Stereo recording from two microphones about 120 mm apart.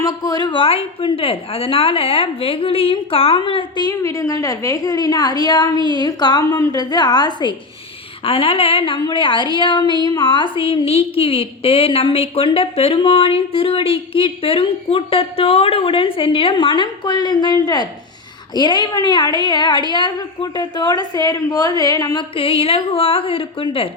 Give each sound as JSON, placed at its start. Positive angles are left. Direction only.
{"t": 0.0, "sound": "a woman's voice", "side_deg": 30}
{"t": 3.8, "sound": "a woman's voice", "side_deg": 30}
{"t": 8.2, "sound": "a woman's voice", "side_deg": 50}
{"t": 22.4, "sound": "a woman's voice", "side_deg": 50}